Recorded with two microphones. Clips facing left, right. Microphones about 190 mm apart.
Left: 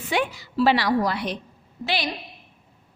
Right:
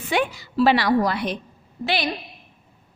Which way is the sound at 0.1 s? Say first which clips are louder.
Right 2 dB; 55° right (ahead or behind).